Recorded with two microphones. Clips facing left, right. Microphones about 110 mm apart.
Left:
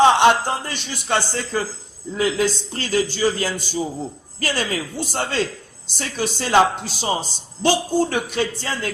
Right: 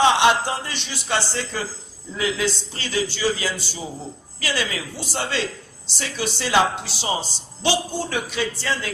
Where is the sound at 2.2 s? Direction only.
35° left (ahead or behind).